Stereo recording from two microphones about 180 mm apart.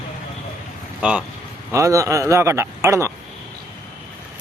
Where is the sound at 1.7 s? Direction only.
15° right (ahead or behind).